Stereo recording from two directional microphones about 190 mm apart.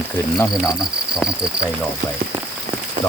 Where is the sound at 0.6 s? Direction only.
5° right (ahead or behind).